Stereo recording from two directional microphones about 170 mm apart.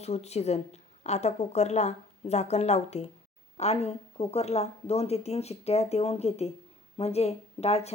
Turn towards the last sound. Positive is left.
turn(degrees=40)  # may be behind; listen again after turning